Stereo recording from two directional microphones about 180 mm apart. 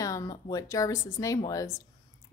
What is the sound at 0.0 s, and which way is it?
Speech, 20° left (ahead or behind).